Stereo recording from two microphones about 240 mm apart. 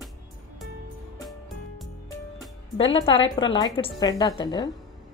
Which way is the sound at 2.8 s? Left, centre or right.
Left.